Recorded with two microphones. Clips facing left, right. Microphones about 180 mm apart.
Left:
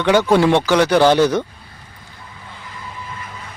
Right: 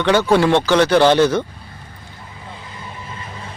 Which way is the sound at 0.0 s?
10° left (ahead or behind).